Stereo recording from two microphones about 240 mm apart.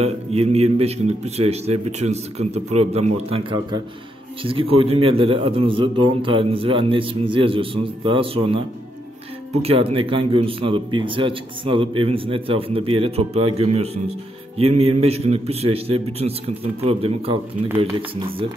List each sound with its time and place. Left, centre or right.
0.0 s speech: right